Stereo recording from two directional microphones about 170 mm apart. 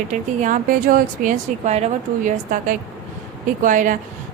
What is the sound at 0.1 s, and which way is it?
A woman's voice, 50° right (ahead or behind).